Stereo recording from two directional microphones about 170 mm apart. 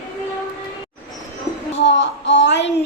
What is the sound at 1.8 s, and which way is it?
Child singing, 90° left.